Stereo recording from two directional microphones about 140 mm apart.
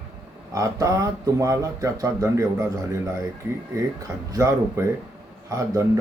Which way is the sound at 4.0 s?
20° right (ahead or behind).